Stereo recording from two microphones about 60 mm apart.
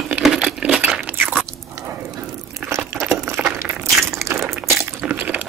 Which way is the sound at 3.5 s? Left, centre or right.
Right.